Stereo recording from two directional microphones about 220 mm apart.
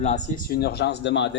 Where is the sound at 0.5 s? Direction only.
50° left (ahead or behind).